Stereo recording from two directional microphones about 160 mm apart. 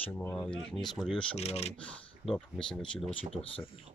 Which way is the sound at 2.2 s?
5° left (ahead or behind).